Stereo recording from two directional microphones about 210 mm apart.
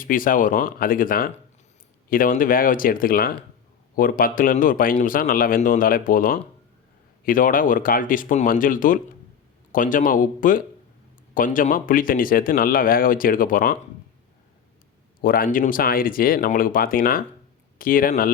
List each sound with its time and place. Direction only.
0.0 s speech: 40° left (ahead or behind)
15.2 s speech: 45° left (ahead or behind)